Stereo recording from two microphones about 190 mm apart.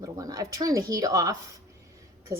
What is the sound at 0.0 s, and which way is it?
A woman's voice, 20° right (ahead or behind).